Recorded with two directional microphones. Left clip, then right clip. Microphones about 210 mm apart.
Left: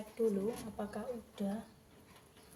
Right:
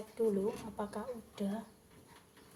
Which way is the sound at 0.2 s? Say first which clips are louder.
Right 1 dB; 30° right (ahead or behind).